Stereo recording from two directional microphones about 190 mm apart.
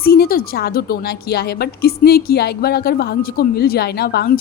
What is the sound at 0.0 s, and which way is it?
A woman's voice, 50° left (ahead or behind).